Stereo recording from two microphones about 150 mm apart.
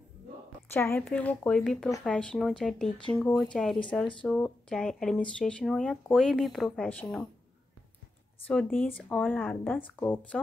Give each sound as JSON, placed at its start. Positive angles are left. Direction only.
{"t": 0.7, "sound": "speech", "side_deg": 15}
{"t": 8.7, "sound": "speech", "side_deg": 10}